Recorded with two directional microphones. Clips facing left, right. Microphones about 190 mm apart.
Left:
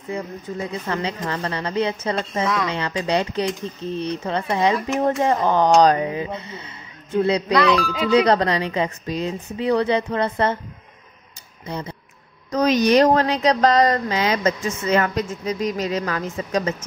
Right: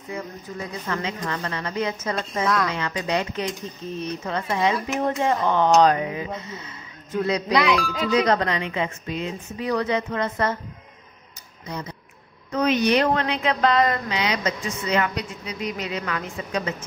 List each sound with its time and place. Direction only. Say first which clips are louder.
0.1 s speech: left 4 dB; 30° left (ahead or behind)
2.4 s speech: right 1 dB; centre (ahead or behind)
2.7 s speech: left 3 dB; 30° left (ahead or behind)
7.5 s speech: left 2 dB; 10° right (ahead or behind)
8.1 s speech: left 4 dB; 30° left (ahead or behind)
11.6 s speech: left 3 dB; 30° left (ahead or behind)
12.4 s speech: left 3 dB; 40° left (ahead or behind)